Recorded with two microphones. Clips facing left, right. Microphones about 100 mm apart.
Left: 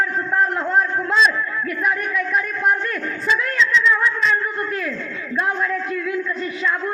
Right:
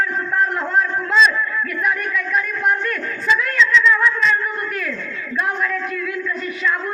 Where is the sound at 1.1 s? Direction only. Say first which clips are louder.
Right 3 dB; 25° left (ahead or behind).